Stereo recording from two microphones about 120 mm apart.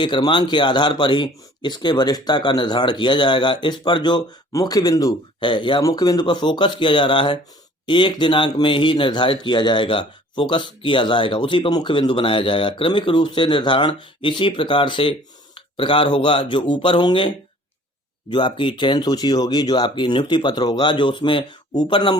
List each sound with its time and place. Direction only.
0.0 s speech: 40° left (ahead or behind)
5.5 s speech: 40° left (ahead or behind)